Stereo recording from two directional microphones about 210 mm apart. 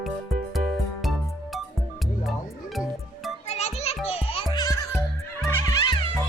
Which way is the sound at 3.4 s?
30° left (ahead or behind).